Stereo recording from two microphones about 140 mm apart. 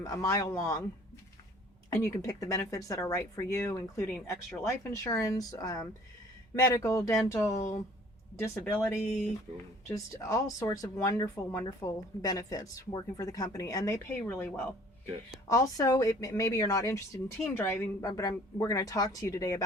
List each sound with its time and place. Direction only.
0.0 s speech: 25° left (ahead or behind)
1.9 s speech: 20° left (ahead or behind)
8.6 s speech: centre (ahead or behind)
9.9 s speech: 20° left (ahead or behind)